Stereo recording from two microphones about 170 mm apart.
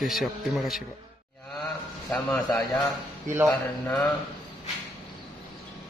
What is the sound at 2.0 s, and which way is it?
Mantra, 15° left (ahead or behind).